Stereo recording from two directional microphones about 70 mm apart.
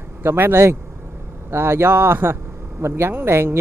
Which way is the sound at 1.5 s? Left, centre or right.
Right.